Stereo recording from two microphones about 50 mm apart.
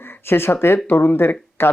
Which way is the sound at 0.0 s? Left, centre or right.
Left.